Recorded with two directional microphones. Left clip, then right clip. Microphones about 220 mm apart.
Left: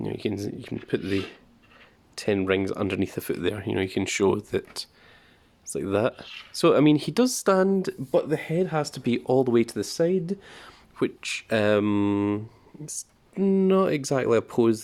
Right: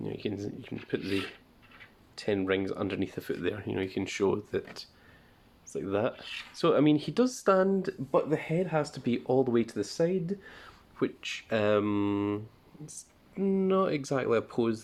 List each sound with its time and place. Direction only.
0.0 s speech: 45° left (ahead or behind)
2.1 s speech: 45° left (ahead or behind)